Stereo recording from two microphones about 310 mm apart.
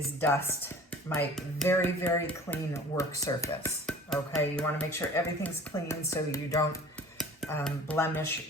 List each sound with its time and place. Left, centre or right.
0.2 s speech: centre